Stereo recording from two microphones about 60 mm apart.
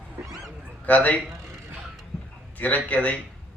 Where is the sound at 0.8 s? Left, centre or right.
Left.